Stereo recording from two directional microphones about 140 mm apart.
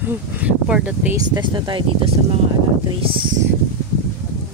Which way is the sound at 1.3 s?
35° right (ahead or behind).